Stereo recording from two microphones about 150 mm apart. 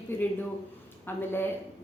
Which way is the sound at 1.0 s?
15° left (ahead or behind).